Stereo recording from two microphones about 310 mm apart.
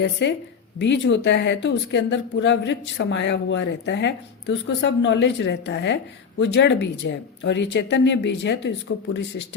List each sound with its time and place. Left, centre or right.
0.0 s speech: left